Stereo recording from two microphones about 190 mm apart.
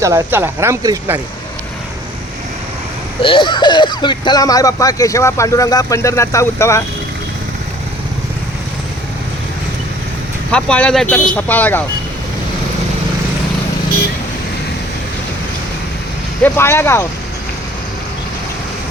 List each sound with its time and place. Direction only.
0.0 s speech: 15° right (ahead or behind)
3.2 s speech: 25° left (ahead or behind)
10.5 s speech: 5° left (ahead or behind)
16.4 s speech: 15° left (ahead or behind)